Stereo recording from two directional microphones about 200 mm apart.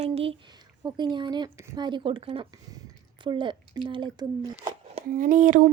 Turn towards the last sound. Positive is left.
turn(degrees=-40)  # may be behind; listen again after turning